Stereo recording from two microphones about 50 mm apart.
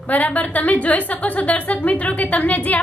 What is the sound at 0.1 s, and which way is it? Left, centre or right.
A woman's voice, left.